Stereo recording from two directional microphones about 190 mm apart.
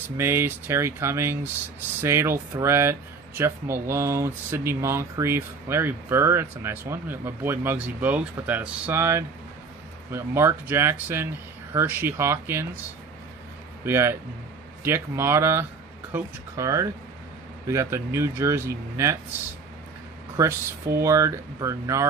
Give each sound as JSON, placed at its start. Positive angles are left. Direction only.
{"t": 0.2, "sound": "speech", "side_deg": -10}
{"t": 13.8, "sound": "speech", "side_deg": -10}
{"t": 20.3, "sound": "speech", "side_deg": -15}